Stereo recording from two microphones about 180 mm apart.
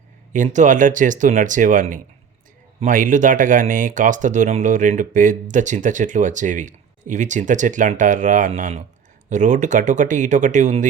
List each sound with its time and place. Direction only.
0.3 s speech: 45° right (ahead or behind)